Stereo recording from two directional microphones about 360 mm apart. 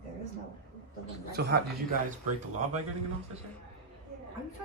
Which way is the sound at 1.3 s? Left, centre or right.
Right.